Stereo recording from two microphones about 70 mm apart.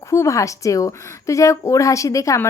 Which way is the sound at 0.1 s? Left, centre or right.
Left.